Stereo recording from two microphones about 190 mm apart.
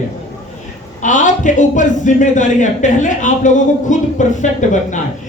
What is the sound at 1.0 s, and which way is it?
Speech, 40° left (ahead or behind).